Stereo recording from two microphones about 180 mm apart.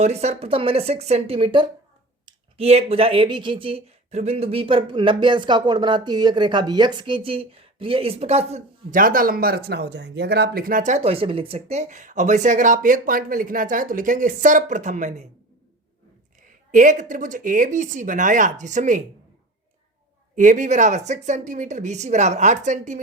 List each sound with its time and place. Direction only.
0.0 s speech: 35° right (ahead or behind)
16.7 s speech: 45° right (ahead or behind)
20.3 s speech: 45° right (ahead or behind)